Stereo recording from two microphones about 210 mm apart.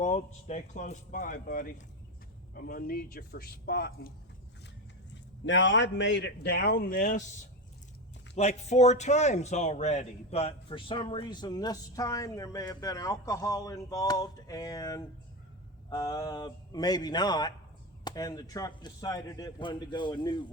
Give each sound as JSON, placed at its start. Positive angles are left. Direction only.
{"t": 0.0, "sound": "a man's voice", "side_deg": 35}
{"t": 5.1, "sound": "a man's voice", "side_deg": 60}
{"t": 8.4, "sound": "a man's voice", "side_deg": 30}